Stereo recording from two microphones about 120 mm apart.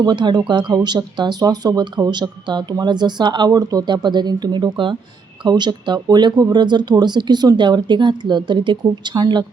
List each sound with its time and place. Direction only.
0.0 s speech: 35° right (ahead or behind)